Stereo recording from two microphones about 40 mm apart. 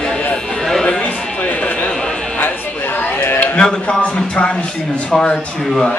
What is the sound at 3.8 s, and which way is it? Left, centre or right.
Speech, left.